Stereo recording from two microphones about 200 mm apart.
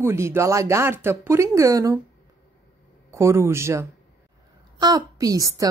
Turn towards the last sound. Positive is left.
turn(degrees=-15)  # may be behind; listen again after turning